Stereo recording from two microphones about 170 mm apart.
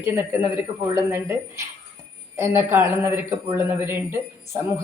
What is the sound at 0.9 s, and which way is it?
Speech, 15° right (ahead or behind).